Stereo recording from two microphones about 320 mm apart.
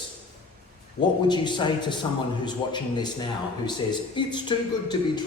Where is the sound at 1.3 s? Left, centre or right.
Centre.